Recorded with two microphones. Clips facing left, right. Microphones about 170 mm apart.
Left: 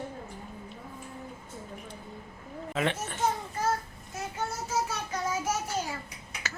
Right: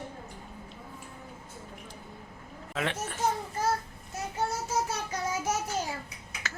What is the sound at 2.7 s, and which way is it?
Speech, centre (ahead or behind).